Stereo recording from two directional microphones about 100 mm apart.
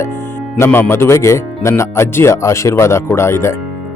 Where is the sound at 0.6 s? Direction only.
20° left (ahead or behind).